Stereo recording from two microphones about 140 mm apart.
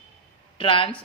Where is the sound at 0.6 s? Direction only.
40° left (ahead or behind).